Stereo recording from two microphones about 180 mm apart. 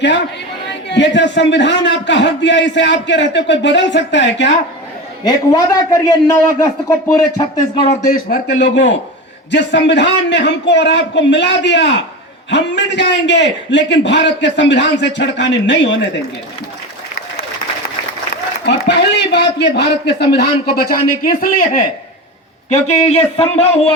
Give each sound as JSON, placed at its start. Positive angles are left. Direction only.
{"t": 0.9, "sound": "a man's voice", "side_deg": 80}
{"t": 5.5, "sound": "a woman's voice", "side_deg": 20}
{"t": 7.9, "sound": "a man's voice", "side_deg": 45}
{"t": 8.4, "sound": "a man's voice", "side_deg": 70}
{"t": 18.6, "sound": "a man's voice", "side_deg": 75}
{"t": 22.7, "sound": "a man's voice", "side_deg": 40}